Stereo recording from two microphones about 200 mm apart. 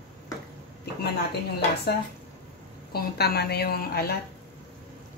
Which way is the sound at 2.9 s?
50° left (ahead or behind).